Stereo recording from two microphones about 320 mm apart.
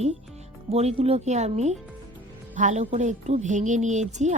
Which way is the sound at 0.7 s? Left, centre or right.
Centre.